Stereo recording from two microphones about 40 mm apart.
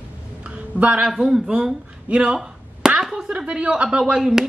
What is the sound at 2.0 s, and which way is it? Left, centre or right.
Speech, right.